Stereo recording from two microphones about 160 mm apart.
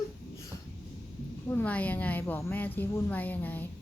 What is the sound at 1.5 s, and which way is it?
A woman's voice, 10° left (ahead or behind).